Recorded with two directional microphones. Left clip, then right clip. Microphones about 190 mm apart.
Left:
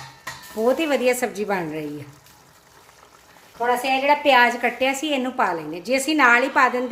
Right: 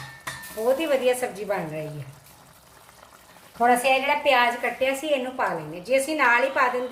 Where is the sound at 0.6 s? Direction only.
55° left (ahead or behind).